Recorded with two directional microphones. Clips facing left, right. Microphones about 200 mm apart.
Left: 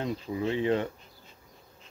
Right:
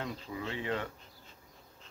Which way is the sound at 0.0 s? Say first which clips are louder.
Left 8 dB; 20° left (ahead or behind).